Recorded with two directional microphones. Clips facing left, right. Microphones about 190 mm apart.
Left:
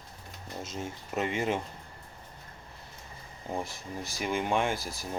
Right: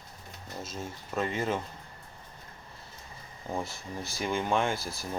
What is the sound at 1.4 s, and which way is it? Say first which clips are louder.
Speech: left 2 dB; 10° left (ahead or behind).